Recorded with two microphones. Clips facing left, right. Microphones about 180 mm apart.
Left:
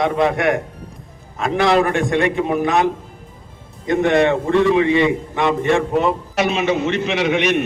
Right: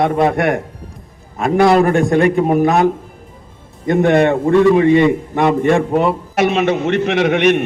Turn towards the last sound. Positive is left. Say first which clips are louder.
# right 5 dB
turn(degrees=-50)  # may be behind; listen again after turning